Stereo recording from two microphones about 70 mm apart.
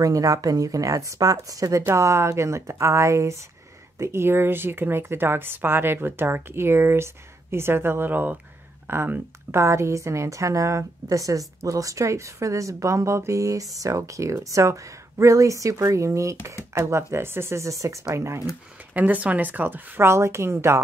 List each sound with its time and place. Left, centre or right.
0.0 s a woman's voice: right
18.9 s speech: right